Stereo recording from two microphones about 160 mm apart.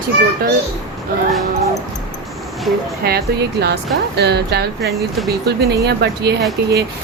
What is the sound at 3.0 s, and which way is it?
Speech, 85° right.